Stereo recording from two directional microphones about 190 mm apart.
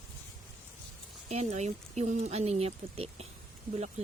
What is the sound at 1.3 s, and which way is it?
Speech, 35° right (ahead or behind).